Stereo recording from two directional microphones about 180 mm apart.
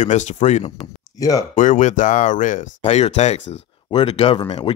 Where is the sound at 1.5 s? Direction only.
45° left (ahead or behind).